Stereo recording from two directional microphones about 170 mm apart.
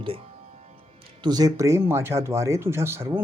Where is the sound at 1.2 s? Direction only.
25° right (ahead or behind).